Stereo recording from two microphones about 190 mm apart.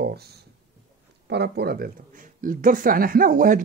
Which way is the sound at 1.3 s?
60° right (ahead or behind).